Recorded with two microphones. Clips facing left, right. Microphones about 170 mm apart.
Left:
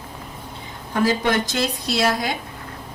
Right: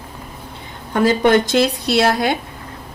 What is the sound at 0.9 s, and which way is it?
Speech, 65° right (ahead or behind).